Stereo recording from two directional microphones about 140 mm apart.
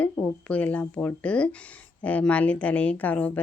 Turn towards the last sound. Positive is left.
turn(degrees=10)  # may be behind; listen again after turning